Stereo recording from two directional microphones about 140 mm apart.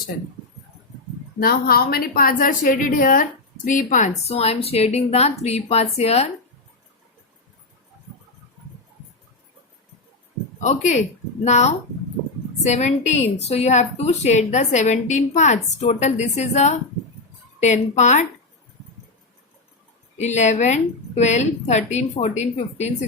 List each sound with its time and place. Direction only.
1.4 s a woman's voice: 90° left; by 4.4 s 65° left (ahead or behind)
4.4 s a woman's voice: 45° left (ahead or behind)
10.6 s a woman's voice: 60° left (ahead or behind)
20.1 s a woman's voice: 55° left (ahead or behind)